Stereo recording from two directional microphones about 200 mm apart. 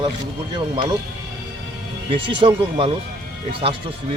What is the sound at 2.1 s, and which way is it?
Speech, 25° right (ahead or behind).